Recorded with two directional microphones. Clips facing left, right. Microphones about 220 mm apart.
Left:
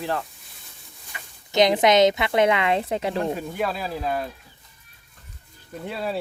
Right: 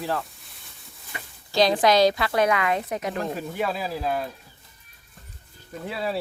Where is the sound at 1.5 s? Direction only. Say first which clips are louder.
Left 2 dB; 20° left (ahead or behind).